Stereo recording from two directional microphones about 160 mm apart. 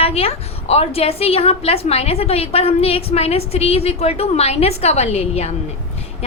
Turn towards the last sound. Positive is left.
turn(degrees=40)  # may be behind; listen again after turning